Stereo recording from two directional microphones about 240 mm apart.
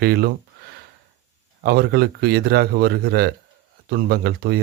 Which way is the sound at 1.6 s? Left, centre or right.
Right.